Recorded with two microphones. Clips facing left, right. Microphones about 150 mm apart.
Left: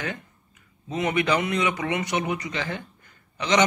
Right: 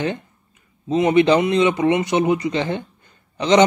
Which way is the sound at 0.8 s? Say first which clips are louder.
Right 9 dB; 25° right (ahead or behind).